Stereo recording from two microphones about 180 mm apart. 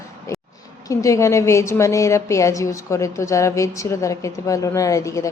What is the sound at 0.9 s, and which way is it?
A woman's voice, 15° left (ahead or behind).